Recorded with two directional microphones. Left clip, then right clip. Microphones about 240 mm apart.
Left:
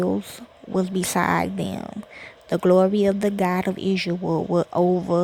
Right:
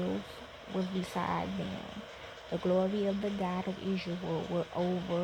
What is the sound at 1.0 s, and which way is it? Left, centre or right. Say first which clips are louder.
Speech: left 14 dB; left.